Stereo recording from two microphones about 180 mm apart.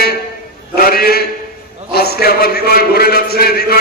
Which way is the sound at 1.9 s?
60° left (ahead or behind).